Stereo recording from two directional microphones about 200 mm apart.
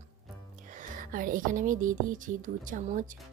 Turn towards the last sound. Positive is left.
turn(degrees=-40)  # may be behind; listen again after turning